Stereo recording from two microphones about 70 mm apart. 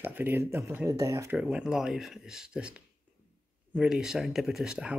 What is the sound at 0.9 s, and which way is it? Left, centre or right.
Speech, right.